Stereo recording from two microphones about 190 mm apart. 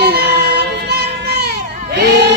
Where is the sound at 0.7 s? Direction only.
60° right (ahead or behind).